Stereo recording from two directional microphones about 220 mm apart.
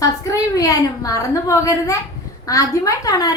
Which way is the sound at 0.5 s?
15° left (ahead or behind).